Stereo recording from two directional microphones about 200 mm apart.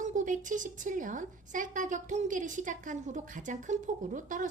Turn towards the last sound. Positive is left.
turn(degrees=-40)  # may be behind; listen again after turning